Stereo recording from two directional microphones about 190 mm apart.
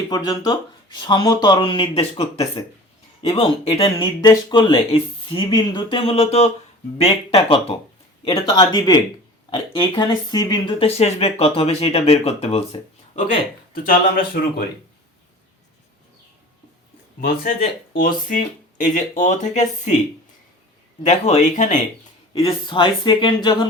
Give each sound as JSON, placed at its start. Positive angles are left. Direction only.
{"t": 0.1, "sound": "speech", "side_deg": 20}
{"t": 13.7, "sound": "speech", "side_deg": 50}
{"t": 17.2, "sound": "speech", "side_deg": 50}
{"t": 21.0, "sound": "speech", "side_deg": 35}
{"t": 22.3, "sound": "speech", "side_deg": 30}